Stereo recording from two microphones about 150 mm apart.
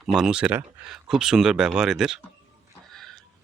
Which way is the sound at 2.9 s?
5° left (ahead or behind).